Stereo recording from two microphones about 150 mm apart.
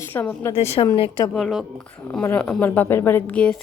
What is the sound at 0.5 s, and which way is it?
Speech, 40° left (ahead or behind).